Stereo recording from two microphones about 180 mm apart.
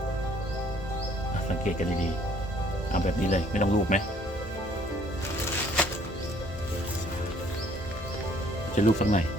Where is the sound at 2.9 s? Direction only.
45° left (ahead or behind).